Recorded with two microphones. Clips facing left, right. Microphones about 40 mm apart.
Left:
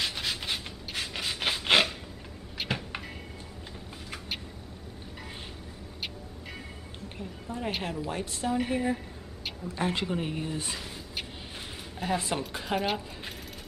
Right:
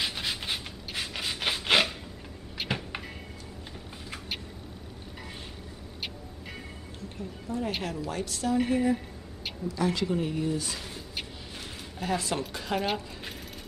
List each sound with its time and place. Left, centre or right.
0.0 s rub: centre
2.6 s a sound: centre
7.2 s a woman's voice: left
9.7 s speech: left
10.0 s a woman's voice: left
12.0 s a woman's voice: centre